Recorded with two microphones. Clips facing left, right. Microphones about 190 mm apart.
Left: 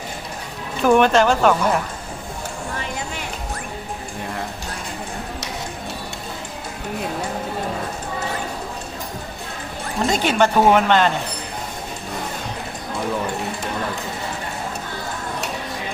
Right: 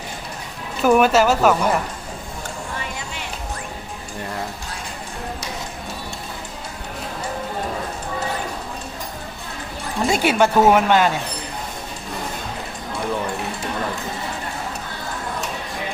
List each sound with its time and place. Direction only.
0.8 s speech: 5° right (ahead or behind)
10.1 s speech: 10° right (ahead or behind)